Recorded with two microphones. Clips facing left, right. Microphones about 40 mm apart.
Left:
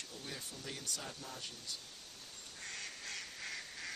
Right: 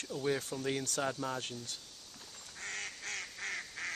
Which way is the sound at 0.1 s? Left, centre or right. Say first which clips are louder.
Right 19 dB; right.